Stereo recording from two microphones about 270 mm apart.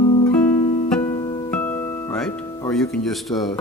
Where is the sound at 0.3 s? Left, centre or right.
Centre.